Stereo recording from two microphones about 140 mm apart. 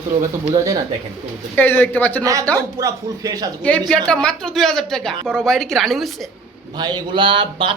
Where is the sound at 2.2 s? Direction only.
25° right (ahead or behind).